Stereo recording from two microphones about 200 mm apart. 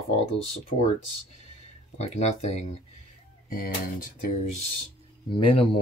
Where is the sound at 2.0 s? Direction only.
30° left (ahead or behind).